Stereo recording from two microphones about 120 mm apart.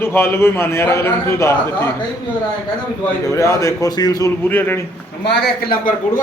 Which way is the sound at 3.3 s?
25° left (ahead or behind).